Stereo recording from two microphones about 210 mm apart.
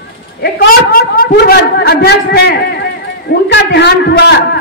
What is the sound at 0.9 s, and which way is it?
A man's voice, 45° left (ahead or behind).